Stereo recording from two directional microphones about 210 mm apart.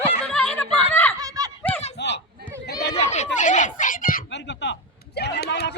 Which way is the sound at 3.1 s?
35° left (ahead or behind).